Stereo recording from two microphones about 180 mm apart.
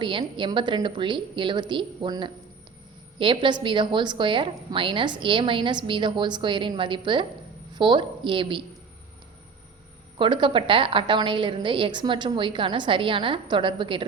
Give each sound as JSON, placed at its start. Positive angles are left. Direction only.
{"t": 0.0, "sound": "a woman's voice", "side_deg": -25}
{"t": 10.2, "sound": "a woman's voice", "side_deg": -25}